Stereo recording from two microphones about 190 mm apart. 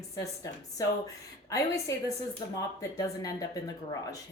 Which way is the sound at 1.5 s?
15° left (ahead or behind).